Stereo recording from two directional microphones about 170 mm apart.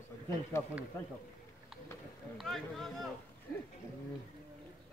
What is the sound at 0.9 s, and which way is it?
Speech, 15° left (ahead or behind).